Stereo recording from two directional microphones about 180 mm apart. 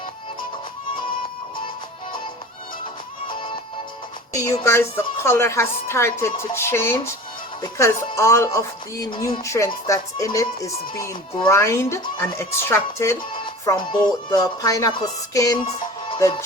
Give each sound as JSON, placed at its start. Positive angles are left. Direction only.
{"t": 3.2, "sound": "music", "side_deg": 25}
{"t": 4.6, "sound": "speech", "side_deg": 15}
{"t": 15.6, "sound": "music", "side_deg": 30}